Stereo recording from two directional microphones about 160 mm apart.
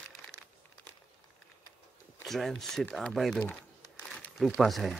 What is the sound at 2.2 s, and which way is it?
Speech, centre (ahead or behind).